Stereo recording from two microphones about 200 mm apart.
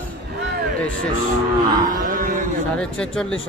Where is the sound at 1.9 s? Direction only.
40° right (ahead or behind).